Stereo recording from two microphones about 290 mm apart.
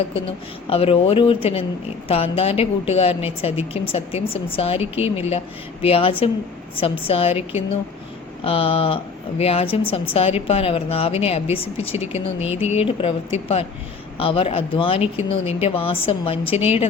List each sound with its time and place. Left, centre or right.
0.1 s speech: centre
14.2 s speech: centre